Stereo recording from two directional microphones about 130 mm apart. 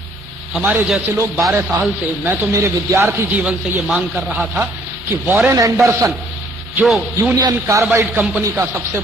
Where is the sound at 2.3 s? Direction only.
20° right (ahead or behind).